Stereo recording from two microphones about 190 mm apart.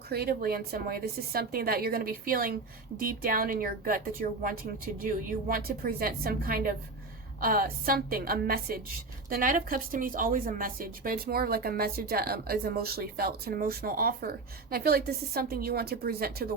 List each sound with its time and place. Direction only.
0.1 s a woman's voice: 55° right (ahead or behind)